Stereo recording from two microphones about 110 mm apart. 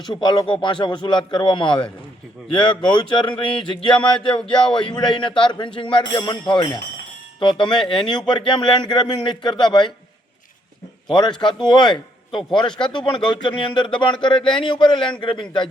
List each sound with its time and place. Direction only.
0.0 s speech: 40° left (ahead or behind)
11.1 s speech: 45° left (ahead or behind)